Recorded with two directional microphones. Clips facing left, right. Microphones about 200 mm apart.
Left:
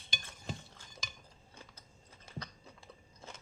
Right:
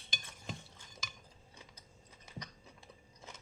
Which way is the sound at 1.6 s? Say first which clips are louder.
Left 3 dB; 20° right (ahead or behind).